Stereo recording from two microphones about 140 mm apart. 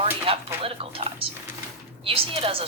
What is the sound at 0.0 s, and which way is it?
Chopping, 40° right (ahead or behind).